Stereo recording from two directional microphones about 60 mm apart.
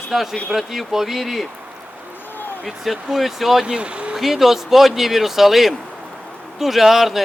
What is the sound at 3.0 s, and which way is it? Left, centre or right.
Speech, centre.